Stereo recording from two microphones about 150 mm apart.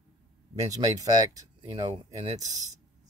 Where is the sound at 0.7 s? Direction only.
25° right (ahead or behind).